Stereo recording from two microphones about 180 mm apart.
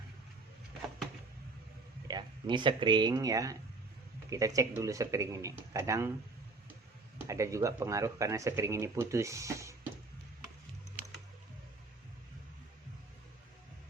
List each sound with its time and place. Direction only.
2.0 s speech: 25° right (ahead or behind)
7.3 s speech: 15° right (ahead or behind)